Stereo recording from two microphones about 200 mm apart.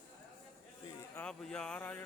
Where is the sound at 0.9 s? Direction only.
15° left (ahead or behind).